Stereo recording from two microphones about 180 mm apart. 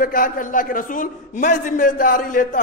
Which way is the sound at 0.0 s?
50° left (ahead or behind).